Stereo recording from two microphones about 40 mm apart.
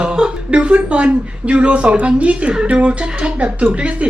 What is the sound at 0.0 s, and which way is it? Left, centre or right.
A woman's voice, right.